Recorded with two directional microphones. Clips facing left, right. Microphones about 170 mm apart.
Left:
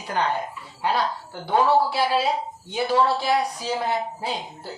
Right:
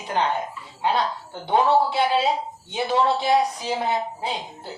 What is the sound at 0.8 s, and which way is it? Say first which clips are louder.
Speech: right 1 dB; 20° right (ahead or behind).